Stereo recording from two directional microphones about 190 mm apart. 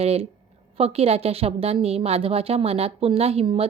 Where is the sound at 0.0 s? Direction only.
30° right (ahead or behind).